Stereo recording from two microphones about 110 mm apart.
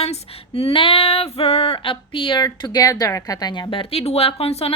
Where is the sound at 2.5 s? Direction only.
35° left (ahead or behind).